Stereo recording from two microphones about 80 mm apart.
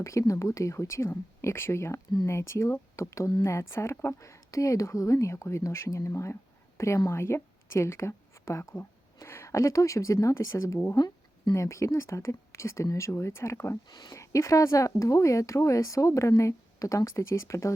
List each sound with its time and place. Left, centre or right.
0.0 s a woman's voice: left
10.9 s a sound: left
11.5 s a woman's voice: left
13.9 s speech: left
14.2 s a woman's voice: left